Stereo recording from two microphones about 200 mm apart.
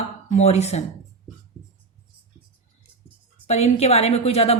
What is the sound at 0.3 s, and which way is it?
Speech, 35° left (ahead or behind).